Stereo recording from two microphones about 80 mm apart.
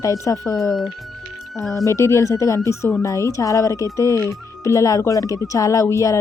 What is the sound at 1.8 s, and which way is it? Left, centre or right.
Speech, left.